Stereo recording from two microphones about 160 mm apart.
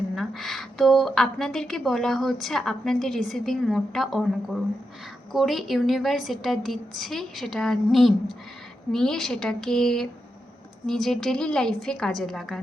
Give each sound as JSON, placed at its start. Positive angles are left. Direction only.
{"t": 0.2, "sound": "a woman's voice", "side_deg": 0}